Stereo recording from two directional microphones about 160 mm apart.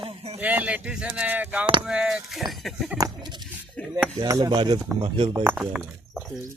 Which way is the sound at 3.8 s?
5° left (ahead or behind).